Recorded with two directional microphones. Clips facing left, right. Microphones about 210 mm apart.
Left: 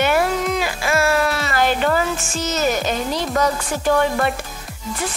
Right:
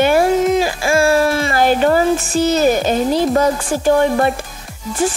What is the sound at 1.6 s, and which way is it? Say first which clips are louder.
Speech: right 5 dB; 40° right (ahead or behind).